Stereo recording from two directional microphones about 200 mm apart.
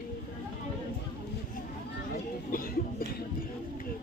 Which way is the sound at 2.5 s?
45° left (ahead or behind).